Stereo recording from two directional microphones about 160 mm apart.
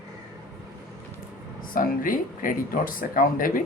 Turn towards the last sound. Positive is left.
turn(degrees=60)  # may be behind; listen again after turning